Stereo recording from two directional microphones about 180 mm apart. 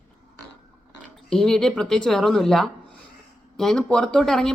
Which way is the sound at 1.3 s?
5° left (ahead or behind).